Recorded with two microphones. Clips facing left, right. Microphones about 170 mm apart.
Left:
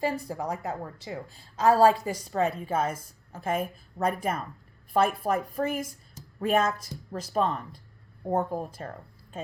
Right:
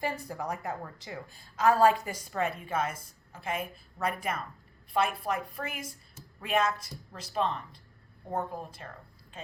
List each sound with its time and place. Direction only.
0.3 s a woman's voice: 20° left (ahead or behind); by 8.9 s 45° left (ahead or behind)